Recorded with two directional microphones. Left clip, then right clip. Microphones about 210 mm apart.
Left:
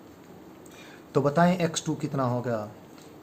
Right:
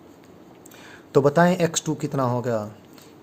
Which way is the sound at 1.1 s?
45° right (ahead or behind).